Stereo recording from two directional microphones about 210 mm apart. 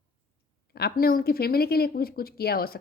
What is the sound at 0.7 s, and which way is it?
Speech, 45° left (ahead or behind).